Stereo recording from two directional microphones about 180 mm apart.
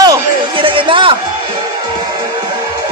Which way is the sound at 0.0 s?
25° right (ahead or behind).